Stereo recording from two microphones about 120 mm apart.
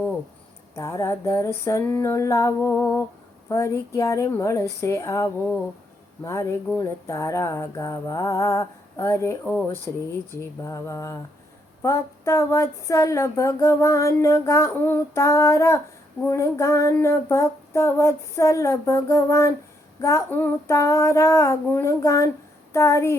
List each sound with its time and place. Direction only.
0.8 s speech: 25° left (ahead or behind)
9.4 s speech: 10° left (ahead or behind)
9.9 s speech: 20° left (ahead or behind)